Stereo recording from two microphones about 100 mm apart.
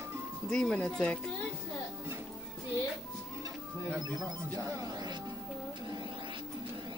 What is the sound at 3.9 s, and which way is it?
Music, 35° right (ahead or behind).